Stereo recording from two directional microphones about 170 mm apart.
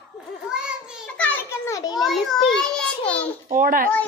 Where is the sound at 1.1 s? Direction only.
10° left (ahead or behind).